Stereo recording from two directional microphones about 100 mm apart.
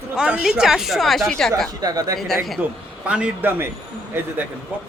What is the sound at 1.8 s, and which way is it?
Speech, 40° right (ahead or behind).